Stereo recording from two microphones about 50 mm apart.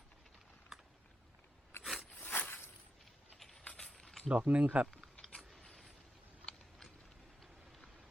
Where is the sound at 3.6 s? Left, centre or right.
Left.